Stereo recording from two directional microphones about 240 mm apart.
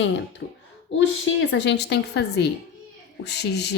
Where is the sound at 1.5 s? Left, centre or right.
Left.